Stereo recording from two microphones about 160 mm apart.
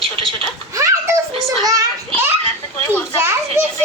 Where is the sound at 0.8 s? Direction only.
20° right (ahead or behind).